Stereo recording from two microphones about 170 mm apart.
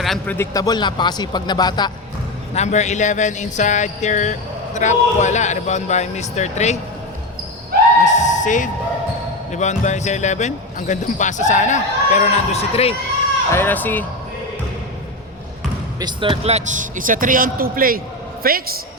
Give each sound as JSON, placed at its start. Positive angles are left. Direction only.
{"t": 0.0, "sound": "a man's voice", "side_deg": 0}
{"t": 0.3, "sound": "speech", "side_deg": 20}
{"t": 2.6, "sound": "speech", "side_deg": 45}
{"t": 8.0, "sound": "a sound", "side_deg": 45}
{"t": 9.5, "sound": "speech", "side_deg": 45}
{"t": 13.5, "sound": "speech", "side_deg": 10}
{"t": 16.0, "sound": "a man's voice", "side_deg": -25}